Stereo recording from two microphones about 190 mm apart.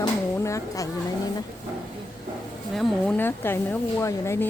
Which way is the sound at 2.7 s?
Centre (ahead or behind).